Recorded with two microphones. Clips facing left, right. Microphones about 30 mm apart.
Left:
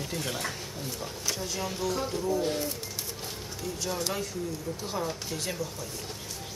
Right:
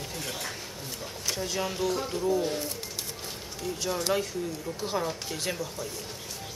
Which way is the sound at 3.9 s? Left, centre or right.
Centre.